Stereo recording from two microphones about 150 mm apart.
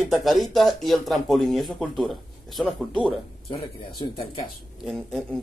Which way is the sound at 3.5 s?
30° left (ahead or behind).